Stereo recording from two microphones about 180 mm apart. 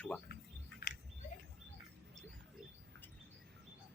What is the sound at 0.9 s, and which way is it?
Bird, 55° left (ahead or behind).